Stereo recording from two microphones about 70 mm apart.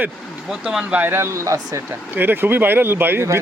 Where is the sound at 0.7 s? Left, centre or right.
Centre.